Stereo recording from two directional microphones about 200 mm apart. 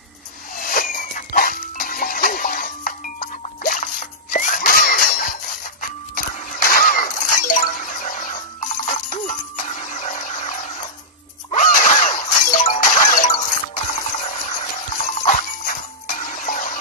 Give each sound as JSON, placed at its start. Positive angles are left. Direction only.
{"t": 0.6, "sound": "music", "side_deg": 45}
{"t": 6.3, "sound": "a sound", "side_deg": 40}
{"t": 15.0, "sound": "music", "side_deg": 40}